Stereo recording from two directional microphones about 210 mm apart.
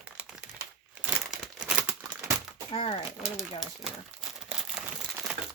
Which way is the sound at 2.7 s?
25° left (ahead or behind).